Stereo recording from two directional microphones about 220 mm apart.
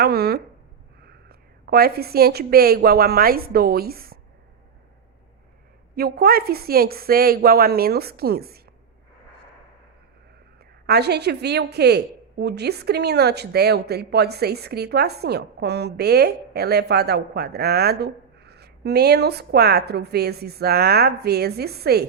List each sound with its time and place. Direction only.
0.0 s a woman's voice: 45° right (ahead or behind)
6.0 s a woman's voice: 45° right (ahead or behind)
10.8 s a woman's voice: 50° right (ahead or behind)